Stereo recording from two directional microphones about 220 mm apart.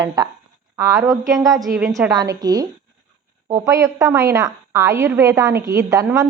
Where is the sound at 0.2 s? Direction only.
15° right (ahead or behind).